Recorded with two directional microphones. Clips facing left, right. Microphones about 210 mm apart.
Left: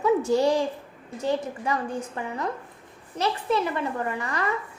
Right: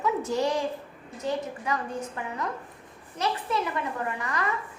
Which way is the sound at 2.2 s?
30° left (ahead or behind).